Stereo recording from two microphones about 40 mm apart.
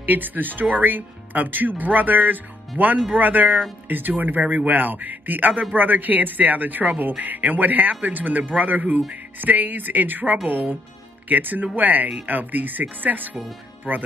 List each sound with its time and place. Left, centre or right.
0.0 s a man's voice: right